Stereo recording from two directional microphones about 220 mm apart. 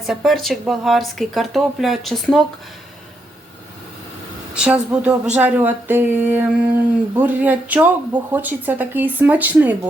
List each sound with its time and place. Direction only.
0.1 s speech: centre (ahead or behind)
4.5 s speech: 5° right (ahead or behind)